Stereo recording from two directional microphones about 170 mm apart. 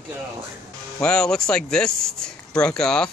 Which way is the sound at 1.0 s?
5° left (ahead or behind).